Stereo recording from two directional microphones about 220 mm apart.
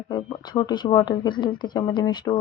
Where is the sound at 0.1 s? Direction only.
20° left (ahead or behind).